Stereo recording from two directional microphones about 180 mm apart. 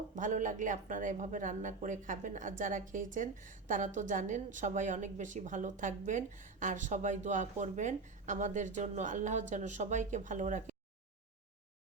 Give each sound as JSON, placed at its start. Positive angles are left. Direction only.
{"t": 0.2, "sound": "a woman's voice", "side_deg": -45}